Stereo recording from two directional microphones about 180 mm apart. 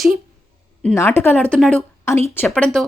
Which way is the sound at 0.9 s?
15° left (ahead or behind).